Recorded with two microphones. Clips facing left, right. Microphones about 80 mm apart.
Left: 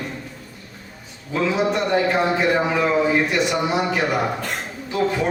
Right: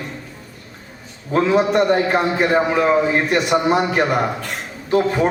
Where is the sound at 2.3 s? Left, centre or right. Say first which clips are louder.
Right 3 dB; right.